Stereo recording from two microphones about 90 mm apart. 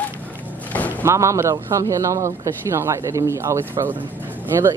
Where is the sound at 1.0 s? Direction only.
35° right (ahead or behind).